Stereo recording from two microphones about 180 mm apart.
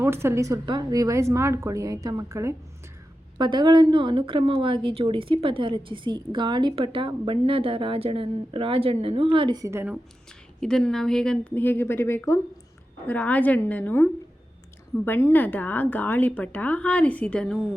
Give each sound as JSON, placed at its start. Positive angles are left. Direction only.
{"t": 0.0, "sound": "a woman's voice", "side_deg": -15}
{"t": 10.6, "sound": "a woman's voice", "side_deg": 5}